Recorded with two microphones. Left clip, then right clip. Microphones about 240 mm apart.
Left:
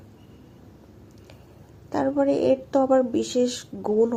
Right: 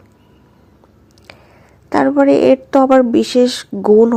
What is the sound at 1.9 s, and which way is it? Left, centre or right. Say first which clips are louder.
A woman's voice: right 11 dB; right.